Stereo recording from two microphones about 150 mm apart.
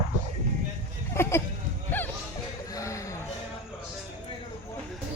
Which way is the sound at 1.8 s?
15° left (ahead or behind).